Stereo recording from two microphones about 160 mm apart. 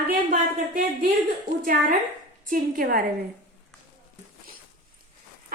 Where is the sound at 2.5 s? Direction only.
65° right (ahead or behind).